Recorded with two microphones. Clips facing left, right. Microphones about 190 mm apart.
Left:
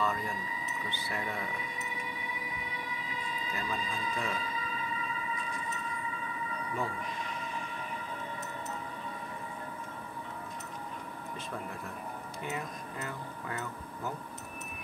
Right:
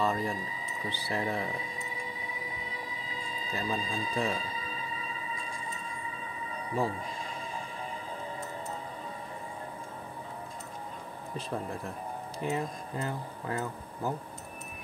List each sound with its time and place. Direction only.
0.0 s speech: 30° right (ahead or behind)
2.7 s a sound: 30° right (ahead or behind)
6.5 s music: 30° right (ahead or behind)
12.4 s speech: 30° right (ahead or behind)